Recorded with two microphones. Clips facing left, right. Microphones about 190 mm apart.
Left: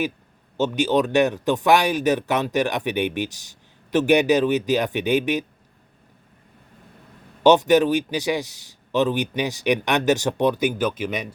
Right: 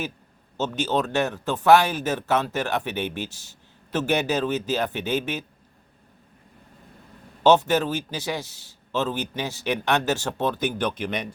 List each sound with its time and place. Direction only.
0.5 s a man's voice: 15° left (ahead or behind)
7.4 s a man's voice: 15° left (ahead or behind)